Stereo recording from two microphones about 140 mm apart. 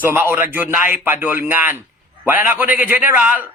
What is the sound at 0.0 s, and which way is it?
A man's voice, 15° right (ahead or behind).